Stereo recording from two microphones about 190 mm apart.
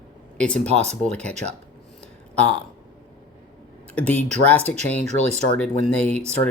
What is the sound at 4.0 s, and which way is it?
Speech, 5° left (ahead or behind).